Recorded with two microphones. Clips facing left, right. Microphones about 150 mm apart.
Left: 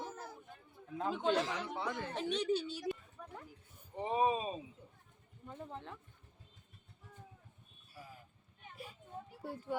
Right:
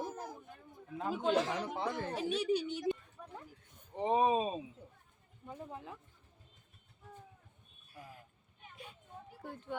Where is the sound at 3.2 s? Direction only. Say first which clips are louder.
Even; 20° right (ahead or behind).